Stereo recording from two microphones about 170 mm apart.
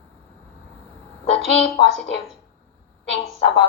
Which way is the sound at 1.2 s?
35° left (ahead or behind).